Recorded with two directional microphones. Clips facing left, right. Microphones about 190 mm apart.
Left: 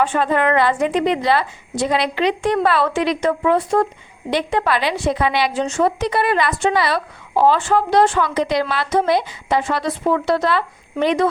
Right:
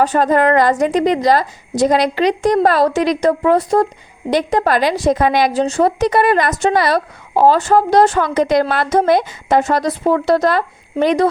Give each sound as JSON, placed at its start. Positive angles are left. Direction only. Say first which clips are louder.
{"t": 0.0, "sound": "a woman's voice", "louder": "right 4 dB", "side_deg": -40}